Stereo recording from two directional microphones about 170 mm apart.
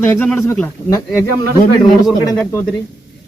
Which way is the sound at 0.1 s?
10° left (ahead or behind).